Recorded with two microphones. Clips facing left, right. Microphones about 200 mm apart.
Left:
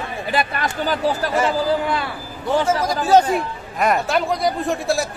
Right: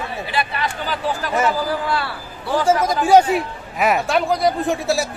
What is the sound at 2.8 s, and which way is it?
Speech, 15° right (ahead or behind).